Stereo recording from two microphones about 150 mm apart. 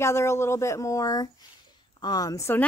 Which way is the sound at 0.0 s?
20° left (ahead or behind).